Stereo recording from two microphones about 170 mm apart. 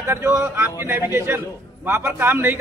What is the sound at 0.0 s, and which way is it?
A man's voice, 15° right (ahead or behind).